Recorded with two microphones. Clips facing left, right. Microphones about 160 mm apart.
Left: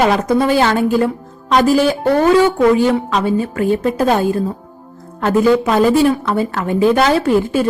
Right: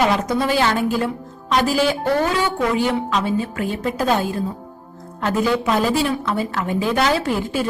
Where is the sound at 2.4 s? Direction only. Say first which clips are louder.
Left 8 dB; 50° left (ahead or behind).